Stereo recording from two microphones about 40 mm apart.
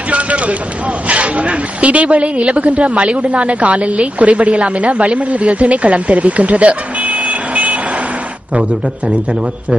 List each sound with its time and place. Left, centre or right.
0.1 s a woman's voice: right